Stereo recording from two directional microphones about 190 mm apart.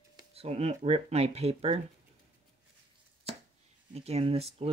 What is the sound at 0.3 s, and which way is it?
Speech, 30° right (ahead or behind).